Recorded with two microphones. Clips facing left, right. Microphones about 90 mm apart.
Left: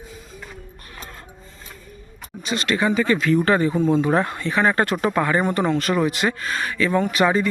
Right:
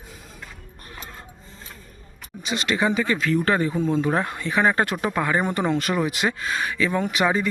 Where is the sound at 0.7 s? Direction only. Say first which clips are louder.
Even; 35° right (ahead or behind).